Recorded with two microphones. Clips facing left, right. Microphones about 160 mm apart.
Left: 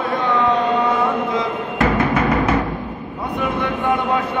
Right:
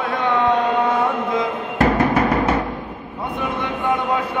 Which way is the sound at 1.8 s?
35° right (ahead or behind).